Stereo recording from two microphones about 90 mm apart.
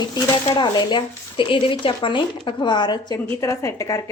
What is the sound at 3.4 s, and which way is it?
Speech, 35° left (ahead or behind).